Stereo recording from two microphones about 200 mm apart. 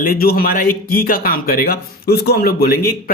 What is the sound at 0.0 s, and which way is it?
A man's voice, 50° left (ahead or behind).